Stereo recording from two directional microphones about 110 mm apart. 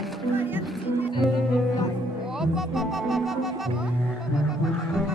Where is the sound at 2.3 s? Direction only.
5° right (ahead or behind).